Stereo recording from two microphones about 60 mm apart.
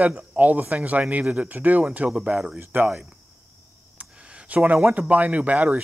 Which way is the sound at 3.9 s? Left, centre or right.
Centre.